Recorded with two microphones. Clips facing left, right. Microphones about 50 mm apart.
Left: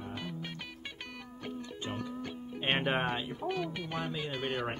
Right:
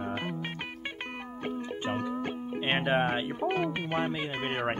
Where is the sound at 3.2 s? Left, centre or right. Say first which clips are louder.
Right 6 dB; right.